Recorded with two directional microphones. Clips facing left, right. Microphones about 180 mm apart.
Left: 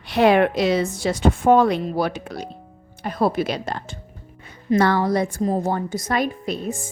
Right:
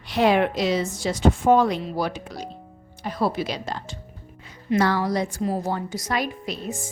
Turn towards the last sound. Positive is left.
turn(degrees=50)  # may be behind; listen again after turning